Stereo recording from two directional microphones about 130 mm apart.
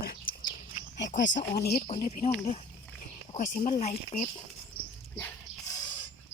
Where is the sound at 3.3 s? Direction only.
65° left (ahead or behind).